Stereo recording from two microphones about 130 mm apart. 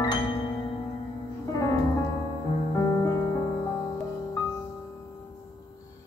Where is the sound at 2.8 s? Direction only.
25° left (ahead or behind).